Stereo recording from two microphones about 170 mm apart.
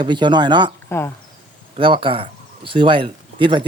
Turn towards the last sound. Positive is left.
turn(degrees=-30)  # may be behind; listen again after turning